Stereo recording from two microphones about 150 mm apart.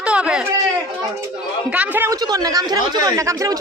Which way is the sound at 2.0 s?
25° right (ahead or behind).